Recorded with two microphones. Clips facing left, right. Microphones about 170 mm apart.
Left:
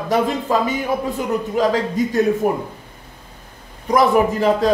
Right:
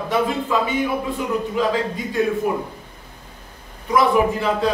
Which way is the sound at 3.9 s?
40° left (ahead or behind).